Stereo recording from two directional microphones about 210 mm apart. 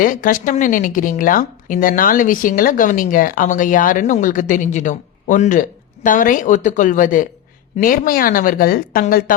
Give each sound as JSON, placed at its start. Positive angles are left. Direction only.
{"t": 0.0, "sound": "a woman's voice", "side_deg": 40}